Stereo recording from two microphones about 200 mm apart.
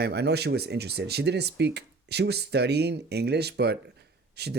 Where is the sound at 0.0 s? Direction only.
55° right (ahead or behind).